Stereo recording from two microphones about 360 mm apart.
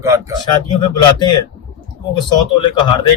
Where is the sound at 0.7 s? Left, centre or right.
Centre.